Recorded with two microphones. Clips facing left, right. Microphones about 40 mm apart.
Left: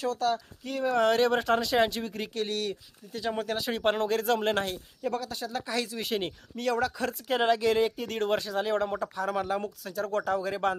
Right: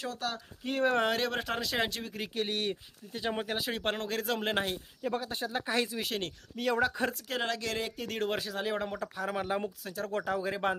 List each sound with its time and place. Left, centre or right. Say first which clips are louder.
0.0 s speech: left 8 dB; centre
0.6 s speech: right 1 dB; right
1.0 s speech: left 7 dB; centre
2.3 s speech: even; centre
3.6 s speech: left 6 dB; centre
5.1 s speech: right 2 dB; right
6.0 s speech: left 4 dB; centre
6.6 s speech: left 1 dB; centre
7.1 s speech: left 8 dB; centre